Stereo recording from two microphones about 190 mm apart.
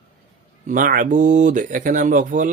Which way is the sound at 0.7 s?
45° right (ahead or behind).